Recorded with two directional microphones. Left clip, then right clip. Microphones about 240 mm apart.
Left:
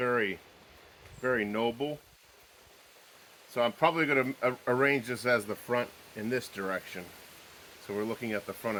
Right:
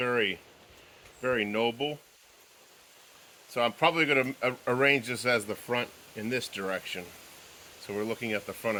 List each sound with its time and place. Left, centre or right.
0.0 s speech: right
3.5 s speech: right